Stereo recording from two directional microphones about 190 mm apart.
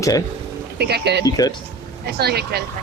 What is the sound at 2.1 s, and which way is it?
Speech, 55° right (ahead or behind).